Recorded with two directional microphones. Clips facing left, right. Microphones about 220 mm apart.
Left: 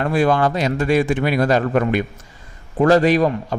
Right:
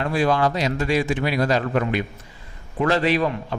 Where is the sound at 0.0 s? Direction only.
55° left (ahead or behind).